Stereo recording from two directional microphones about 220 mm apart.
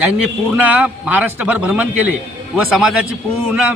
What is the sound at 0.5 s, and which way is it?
A man's voice, 5° right (ahead or behind).